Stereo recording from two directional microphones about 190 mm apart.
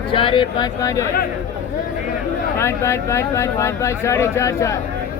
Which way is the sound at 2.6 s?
15° left (ahead or behind).